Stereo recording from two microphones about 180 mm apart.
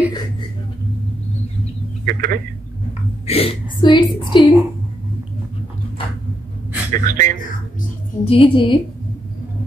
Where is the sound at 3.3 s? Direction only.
30° left (ahead or behind).